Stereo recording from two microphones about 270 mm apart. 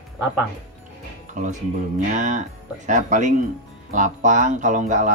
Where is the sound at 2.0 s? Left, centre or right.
Right.